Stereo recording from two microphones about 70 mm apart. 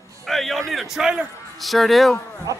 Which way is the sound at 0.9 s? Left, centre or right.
Centre.